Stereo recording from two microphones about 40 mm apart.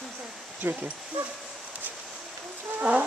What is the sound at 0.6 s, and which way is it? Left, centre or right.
Speech, right.